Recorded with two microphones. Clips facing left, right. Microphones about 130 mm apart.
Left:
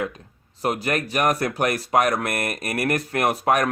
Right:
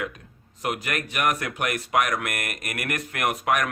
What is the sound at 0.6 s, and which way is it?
Speech, 35° left (ahead or behind).